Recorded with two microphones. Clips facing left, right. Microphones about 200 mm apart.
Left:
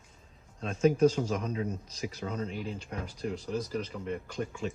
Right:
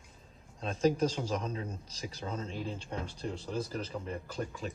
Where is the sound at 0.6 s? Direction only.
35° right (ahead or behind).